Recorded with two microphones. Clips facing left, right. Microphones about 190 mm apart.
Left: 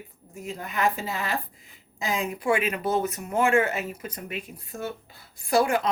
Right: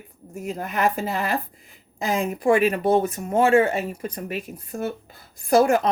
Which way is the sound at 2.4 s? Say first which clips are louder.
Right 7 dB; 35° right (ahead or behind).